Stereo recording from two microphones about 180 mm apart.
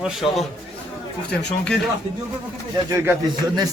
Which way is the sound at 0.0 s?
Centre (ahead or behind).